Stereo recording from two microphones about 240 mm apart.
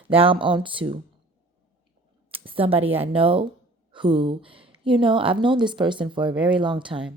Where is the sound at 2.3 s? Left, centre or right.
Right.